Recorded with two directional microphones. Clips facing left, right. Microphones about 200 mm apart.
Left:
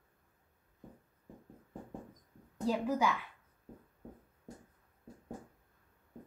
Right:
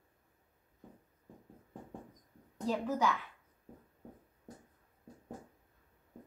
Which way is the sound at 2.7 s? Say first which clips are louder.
Left 1 dB; 10° left (ahead or behind).